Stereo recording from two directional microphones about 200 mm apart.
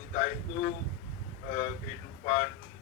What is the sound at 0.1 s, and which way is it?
A man's voice, 40° left (ahead or behind).